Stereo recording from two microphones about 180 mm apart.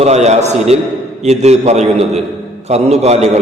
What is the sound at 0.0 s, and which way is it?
A man's voice, 35° right (ahead or behind).